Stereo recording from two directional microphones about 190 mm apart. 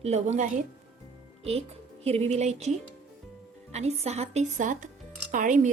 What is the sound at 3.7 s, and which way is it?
A woman's voice, 35° right (ahead or behind).